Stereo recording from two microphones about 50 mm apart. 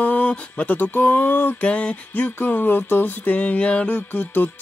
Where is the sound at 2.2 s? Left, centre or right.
Left.